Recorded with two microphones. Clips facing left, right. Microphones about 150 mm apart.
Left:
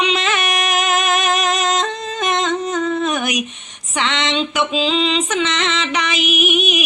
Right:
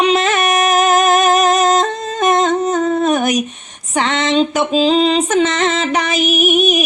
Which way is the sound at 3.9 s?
45° right (ahead or behind).